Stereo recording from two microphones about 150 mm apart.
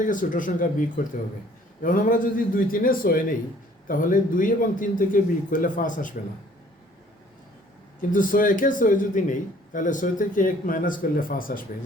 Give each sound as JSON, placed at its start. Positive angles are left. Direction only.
{"t": 0.0, "sound": "a man's voice", "side_deg": 60}
{"t": 8.1, "sound": "a man's voice", "side_deg": 65}